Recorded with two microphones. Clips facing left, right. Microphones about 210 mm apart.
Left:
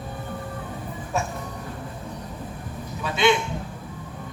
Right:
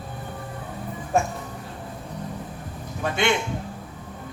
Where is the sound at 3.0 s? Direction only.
50° right (ahead or behind).